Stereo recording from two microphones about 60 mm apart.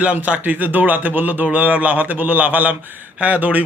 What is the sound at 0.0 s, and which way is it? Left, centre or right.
Speech, right.